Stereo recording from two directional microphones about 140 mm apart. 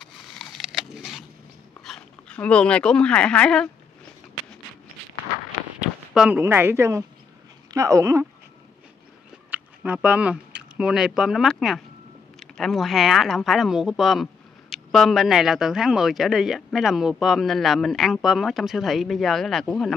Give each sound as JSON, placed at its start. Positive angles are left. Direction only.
{"t": 0.0, "sound": "a sound", "side_deg": 0}
{"t": 1.9, "sound": "speech", "side_deg": 5}
{"t": 5.8, "sound": "run", "side_deg": -5}
{"t": 6.4, "sound": "speech", "side_deg": -15}
{"t": 9.9, "sound": "speech", "side_deg": -10}